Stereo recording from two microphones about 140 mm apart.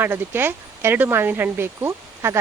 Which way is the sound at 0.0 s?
15° right (ahead or behind).